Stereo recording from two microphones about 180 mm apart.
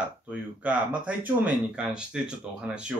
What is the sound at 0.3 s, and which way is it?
Speech, 10° right (ahead or behind).